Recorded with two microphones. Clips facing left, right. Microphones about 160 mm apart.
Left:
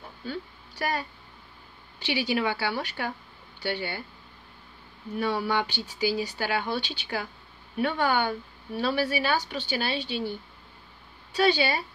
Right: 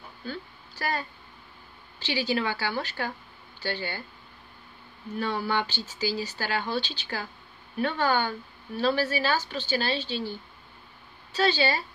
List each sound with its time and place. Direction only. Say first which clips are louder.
0.3 s a woman's voice: left 2 dB; 15° left (ahead or behind)
5.2 s a woman's voice: left 1 dB; 15° left (ahead or behind)
11.3 s a woman's voice: left 1 dB; 15° left (ahead or behind)